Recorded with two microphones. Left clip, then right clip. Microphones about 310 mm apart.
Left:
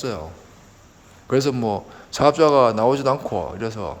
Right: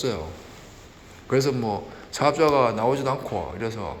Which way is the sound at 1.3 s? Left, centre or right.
Centre.